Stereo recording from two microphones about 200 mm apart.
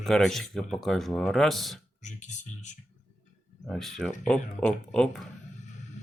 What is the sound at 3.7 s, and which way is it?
Speech, centre (ahead or behind).